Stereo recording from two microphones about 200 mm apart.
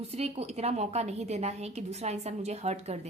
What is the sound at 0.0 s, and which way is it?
A woman's voice, 30° right (ahead or behind).